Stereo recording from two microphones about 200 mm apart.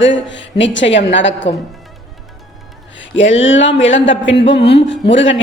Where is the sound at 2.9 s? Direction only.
70° left (ahead or behind).